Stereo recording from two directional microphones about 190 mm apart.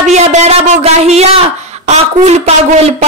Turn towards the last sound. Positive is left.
turn(degrees=-35)  # may be behind; listen again after turning